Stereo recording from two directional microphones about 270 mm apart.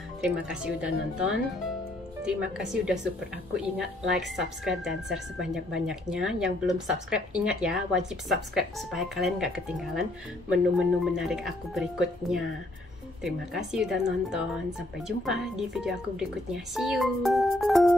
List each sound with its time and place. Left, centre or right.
0.2 s a woman's voice: centre
13.7 s a woman's voice: centre